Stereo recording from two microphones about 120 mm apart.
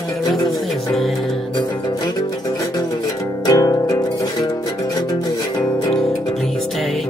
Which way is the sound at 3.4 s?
30° left (ahead or behind).